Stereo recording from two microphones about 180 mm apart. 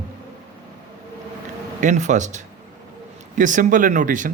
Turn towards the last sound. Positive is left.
turn(degrees=-45)  # may be behind; listen again after turning